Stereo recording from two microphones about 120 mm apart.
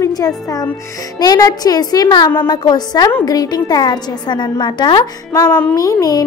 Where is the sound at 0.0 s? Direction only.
30° left (ahead or behind).